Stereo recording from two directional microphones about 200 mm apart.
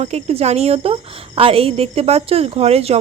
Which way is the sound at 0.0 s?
30° right (ahead or behind).